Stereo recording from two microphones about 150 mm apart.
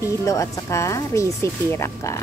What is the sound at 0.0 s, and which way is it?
A woman's voice, 20° left (ahead or behind).